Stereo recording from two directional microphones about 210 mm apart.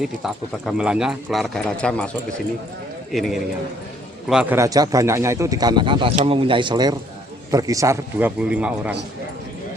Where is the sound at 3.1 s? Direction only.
Centre (ahead or behind).